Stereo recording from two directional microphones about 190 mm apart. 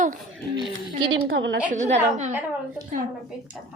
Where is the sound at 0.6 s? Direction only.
25° right (ahead or behind).